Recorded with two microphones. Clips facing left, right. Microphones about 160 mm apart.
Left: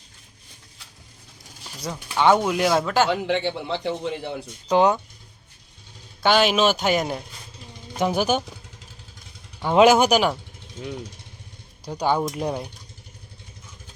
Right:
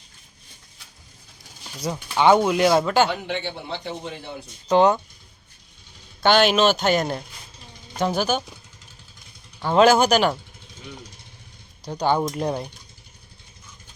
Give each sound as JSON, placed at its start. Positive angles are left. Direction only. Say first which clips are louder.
{"t": 2.1, "sound": "speech", "louder": "right 2 dB", "side_deg": 0}
{"t": 3.2, "sound": "a man's voice", "louder": "left 5 dB", "side_deg": 85}
{"t": 4.7, "sound": "speech", "louder": "right 1 dB", "side_deg": 10}
{"t": 6.2, "sound": "speech", "louder": "right 1 dB", "side_deg": 0}
{"t": 9.6, "sound": "speech", "louder": "left 1 dB", "side_deg": 15}
{"t": 11.9, "sound": "speech", "louder": "right 1 dB", "side_deg": 5}